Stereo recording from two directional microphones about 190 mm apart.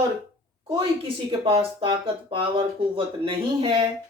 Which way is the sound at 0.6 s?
25° right (ahead or behind).